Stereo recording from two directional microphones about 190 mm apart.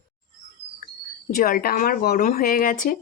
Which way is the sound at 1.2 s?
50° left (ahead or behind).